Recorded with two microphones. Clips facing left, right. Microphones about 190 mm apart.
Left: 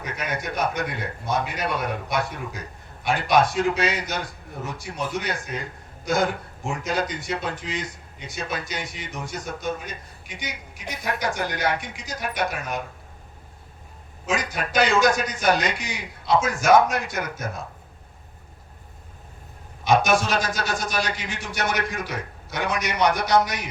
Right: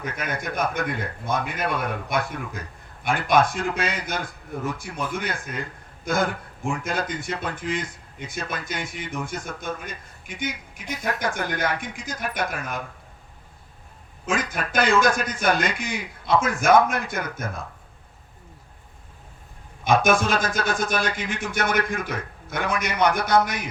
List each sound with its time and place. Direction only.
0.0 s a man's voice: 50° right (ahead or behind)
14.3 s a man's voice: 50° right (ahead or behind)
19.8 s a man's voice: 50° right (ahead or behind)